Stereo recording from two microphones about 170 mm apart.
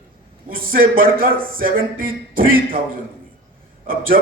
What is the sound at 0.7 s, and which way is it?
A man's voice, 55° right (ahead or behind).